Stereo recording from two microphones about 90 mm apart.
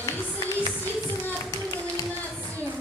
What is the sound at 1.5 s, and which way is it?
Clapping, 40° left (ahead or behind).